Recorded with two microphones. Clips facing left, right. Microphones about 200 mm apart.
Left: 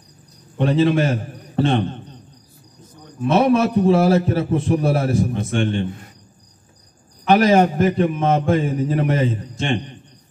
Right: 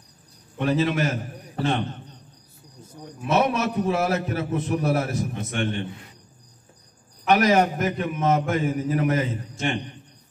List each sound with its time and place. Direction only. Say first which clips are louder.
0.6 s a man's voice: left 6 dB; 30° left (ahead or behind)
2.8 s wild animals: left 7 dB; 10° right (ahead or behind)
3.3 s a man's voice: left 6 dB; 30° left (ahead or behind)
7.2 s a man's voice: left 5 dB; 30° left (ahead or behind)